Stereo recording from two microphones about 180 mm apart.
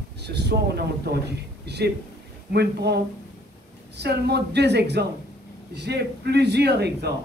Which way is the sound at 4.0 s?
65° right (ahead or behind).